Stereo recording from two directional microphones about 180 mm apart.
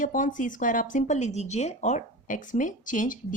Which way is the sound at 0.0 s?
45° left (ahead or behind).